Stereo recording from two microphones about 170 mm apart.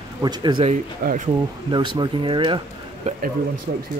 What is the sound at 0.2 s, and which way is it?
Speech, 25° right (ahead or behind).